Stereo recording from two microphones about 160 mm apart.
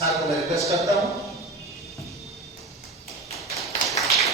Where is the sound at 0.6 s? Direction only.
Centre (ahead or behind).